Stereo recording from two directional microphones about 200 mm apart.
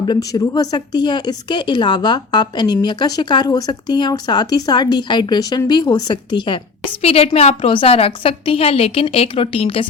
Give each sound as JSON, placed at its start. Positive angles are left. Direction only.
{"t": 0.0, "sound": "speech", "side_deg": 20}